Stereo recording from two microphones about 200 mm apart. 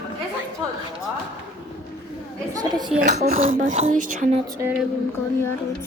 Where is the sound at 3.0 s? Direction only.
35° right (ahead or behind).